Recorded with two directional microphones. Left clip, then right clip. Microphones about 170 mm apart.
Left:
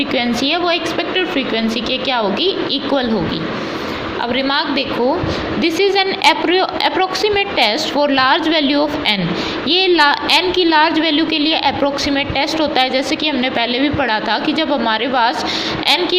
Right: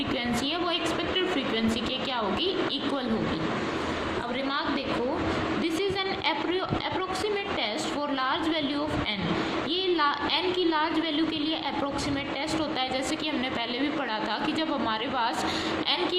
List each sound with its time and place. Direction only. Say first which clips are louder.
5.6 s a woman's voice: left 14 dB; 35° left (ahead or behind)